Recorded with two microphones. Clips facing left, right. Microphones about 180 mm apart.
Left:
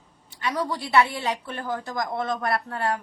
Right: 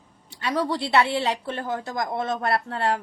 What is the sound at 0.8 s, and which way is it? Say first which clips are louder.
A woman's voice: right 1 dB; 30° right (ahead or behind).